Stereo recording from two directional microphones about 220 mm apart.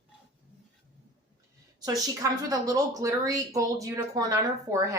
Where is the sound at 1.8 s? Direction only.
15° right (ahead or behind).